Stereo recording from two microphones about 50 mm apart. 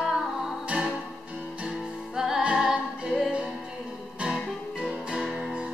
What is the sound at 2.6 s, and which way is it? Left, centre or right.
A capella, centre.